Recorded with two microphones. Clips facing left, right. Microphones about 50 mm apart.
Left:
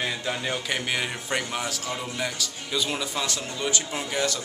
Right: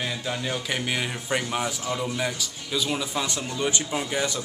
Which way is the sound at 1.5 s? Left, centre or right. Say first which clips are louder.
Right 3 dB; centre.